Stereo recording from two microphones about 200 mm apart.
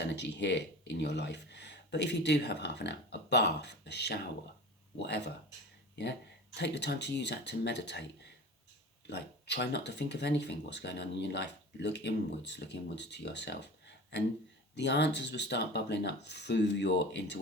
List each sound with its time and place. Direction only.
0.0 s speech: 60° left (ahead or behind)
9.0 s speech: 60° left (ahead or behind)
14.8 s speech: 60° left (ahead or behind)